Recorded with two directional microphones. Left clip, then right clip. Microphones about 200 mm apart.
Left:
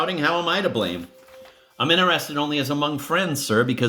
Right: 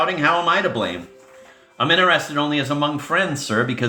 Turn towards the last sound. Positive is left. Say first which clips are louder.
# even
turn(degrees=45)  # may be behind; listen again after turning